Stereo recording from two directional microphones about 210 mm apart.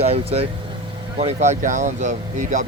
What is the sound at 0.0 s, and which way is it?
Speech, 30° right (ahead or behind).